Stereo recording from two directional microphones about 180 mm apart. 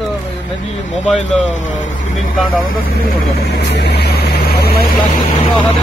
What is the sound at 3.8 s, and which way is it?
Vehicle, 65° left (ahead or behind).